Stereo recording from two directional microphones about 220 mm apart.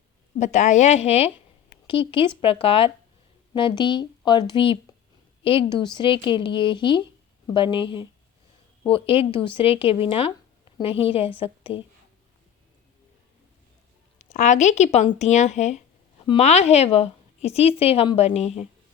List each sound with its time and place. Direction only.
0.3 s speech: 30° left (ahead or behind)
2.4 s a woman's voice: 25° left (ahead or behind)
9.0 s speech: 10° right (ahead or behind)
9.6 s a woman's voice: 25° left (ahead or behind)
14.2 s a woman's voice: 35° left (ahead or behind)